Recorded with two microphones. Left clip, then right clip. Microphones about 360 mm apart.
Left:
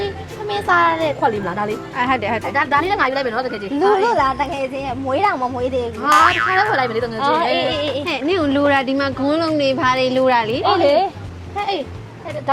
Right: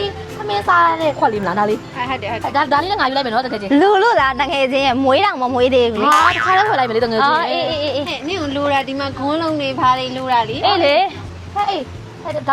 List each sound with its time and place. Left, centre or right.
0.4 s a woman's voice: right
2.0 s speech: left
2.5 s a woman's voice: right
4.1 s a woman's voice: right
5.4 s a woman's voice: right
6.1 s boing: centre
6.6 s speech: right
7.2 s a woman's voice: right
8.0 s speech: left
10.6 s a woman's voice: centre